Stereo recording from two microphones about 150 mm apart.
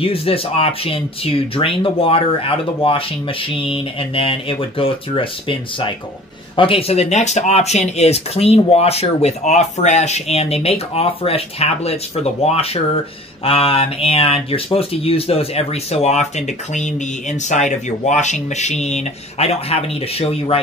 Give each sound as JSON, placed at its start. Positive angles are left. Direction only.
{"t": 0.0, "sound": "speech", "side_deg": 40}